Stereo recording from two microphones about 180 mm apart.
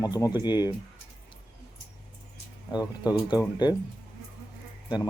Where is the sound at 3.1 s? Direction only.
25° left (ahead or behind).